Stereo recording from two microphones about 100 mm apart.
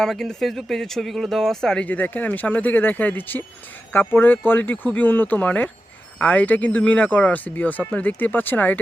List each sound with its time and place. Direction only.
0.0 s speech: 5° left (ahead or behind)